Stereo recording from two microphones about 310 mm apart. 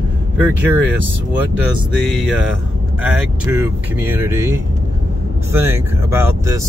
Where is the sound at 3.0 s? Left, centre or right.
Centre.